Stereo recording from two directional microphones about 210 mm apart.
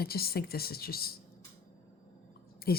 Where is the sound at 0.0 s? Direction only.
45° left (ahead or behind).